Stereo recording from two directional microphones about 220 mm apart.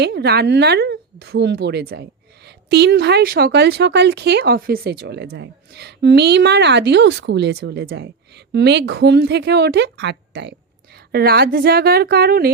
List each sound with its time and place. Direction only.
0.0 s speech: 50° right (ahead or behind)